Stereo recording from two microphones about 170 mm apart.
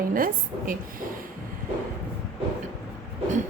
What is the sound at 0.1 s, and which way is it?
Speech, 55° right (ahead or behind).